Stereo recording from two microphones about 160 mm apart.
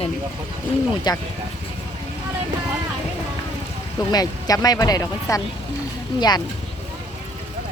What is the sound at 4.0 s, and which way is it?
Speech, 25° left (ahead or behind).